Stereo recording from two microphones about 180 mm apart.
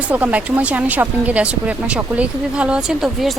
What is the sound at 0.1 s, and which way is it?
A woman's voice, 10° right (ahead or behind).